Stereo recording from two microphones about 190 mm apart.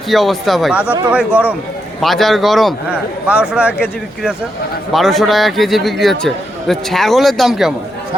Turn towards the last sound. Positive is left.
turn(degrees=0)  # may be behind; listen again after turning